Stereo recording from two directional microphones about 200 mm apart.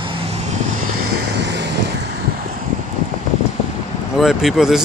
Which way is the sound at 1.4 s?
60° right (ahead or behind).